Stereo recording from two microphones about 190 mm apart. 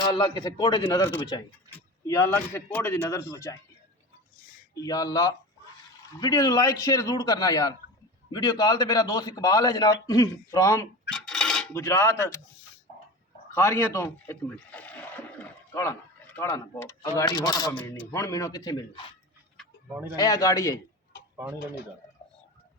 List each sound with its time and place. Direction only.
0.0 s a man's voice: 25° left (ahead or behind)
4.7 s a man's voice: 20° left (ahead or behind)
11.1 s cutlery: 5° left (ahead or behind)
11.7 s a man's voice: 15° left (ahead or behind)
13.5 s a man's voice: 15° left (ahead or behind)
19.9 s speech: 10° right (ahead or behind)
20.1 s a man's voice: 20° left (ahead or behind)